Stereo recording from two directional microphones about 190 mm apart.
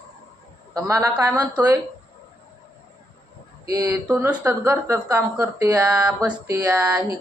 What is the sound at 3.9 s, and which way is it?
Speech, 10° right (ahead or behind).